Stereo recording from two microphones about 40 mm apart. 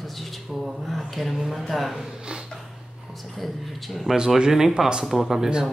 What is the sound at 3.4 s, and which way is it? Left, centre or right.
Speech, centre.